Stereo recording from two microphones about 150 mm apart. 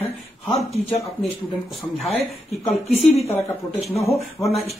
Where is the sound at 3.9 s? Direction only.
20° left (ahead or behind).